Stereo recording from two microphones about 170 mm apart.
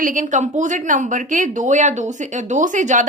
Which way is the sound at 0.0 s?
50° right (ahead or behind).